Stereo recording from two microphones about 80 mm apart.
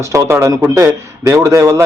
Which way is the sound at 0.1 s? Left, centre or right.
Right.